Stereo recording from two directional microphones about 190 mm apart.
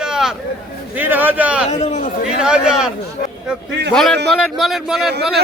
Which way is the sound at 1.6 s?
35° left (ahead or behind).